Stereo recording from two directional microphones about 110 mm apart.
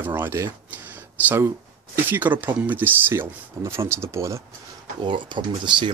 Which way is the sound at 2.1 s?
15° right (ahead or behind).